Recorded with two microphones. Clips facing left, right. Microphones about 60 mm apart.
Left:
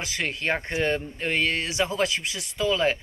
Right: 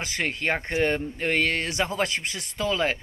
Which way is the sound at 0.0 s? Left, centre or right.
Right.